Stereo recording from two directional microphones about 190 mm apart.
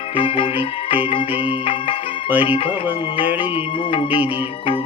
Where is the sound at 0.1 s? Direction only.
30° left (ahead or behind).